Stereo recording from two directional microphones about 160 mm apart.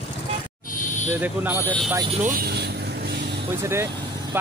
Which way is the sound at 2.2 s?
70° right (ahead or behind).